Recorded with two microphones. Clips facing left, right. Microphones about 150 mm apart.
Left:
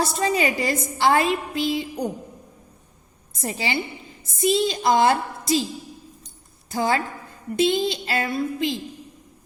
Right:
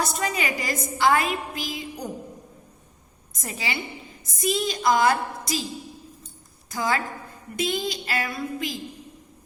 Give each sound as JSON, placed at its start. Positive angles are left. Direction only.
{"t": 0.0, "sound": "a woman's voice", "side_deg": 30}
{"t": 3.3, "sound": "a woman's voice", "side_deg": 30}
{"t": 6.7, "sound": "a woman's voice", "side_deg": 30}